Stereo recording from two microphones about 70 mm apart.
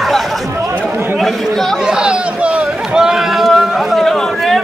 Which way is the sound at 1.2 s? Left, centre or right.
Centre.